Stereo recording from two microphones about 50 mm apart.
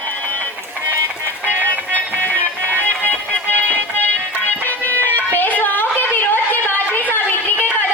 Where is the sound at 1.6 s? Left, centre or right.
Left.